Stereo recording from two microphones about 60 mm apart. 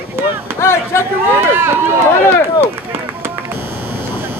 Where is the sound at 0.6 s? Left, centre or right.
Left.